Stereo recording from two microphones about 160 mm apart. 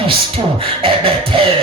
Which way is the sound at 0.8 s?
35° right (ahead or behind).